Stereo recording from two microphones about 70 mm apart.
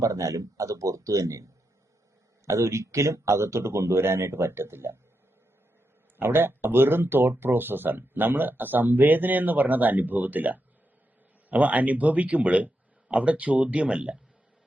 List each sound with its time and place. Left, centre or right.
0.0 s a man's voice: right
2.5 s speech: right
6.1 s speech: right; by 14.2 s centre